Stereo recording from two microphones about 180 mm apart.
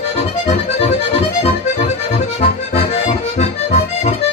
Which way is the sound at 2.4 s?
35° left (ahead or behind).